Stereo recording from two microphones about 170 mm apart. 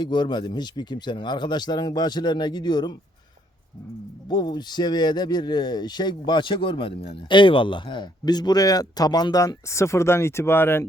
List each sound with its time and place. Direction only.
0.0 s speech: 25° left (ahead or behind)
4.3 s speech: 25° left (ahead or behind)